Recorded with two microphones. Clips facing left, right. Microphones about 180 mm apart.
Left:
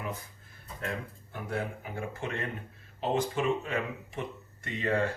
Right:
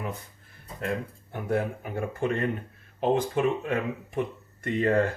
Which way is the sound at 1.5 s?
55° right (ahead or behind).